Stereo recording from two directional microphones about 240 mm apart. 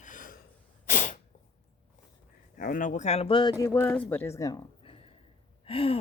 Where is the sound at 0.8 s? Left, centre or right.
Left.